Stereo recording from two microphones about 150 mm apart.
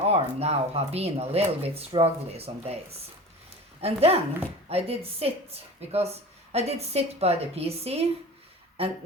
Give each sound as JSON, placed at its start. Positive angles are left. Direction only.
{"t": 0.1, "sound": "a woman's voice", "side_deg": -45}
{"t": 3.8, "sound": "a woman's voice", "side_deg": -40}